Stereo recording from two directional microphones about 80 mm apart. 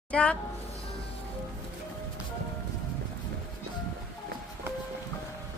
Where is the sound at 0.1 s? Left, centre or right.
Centre.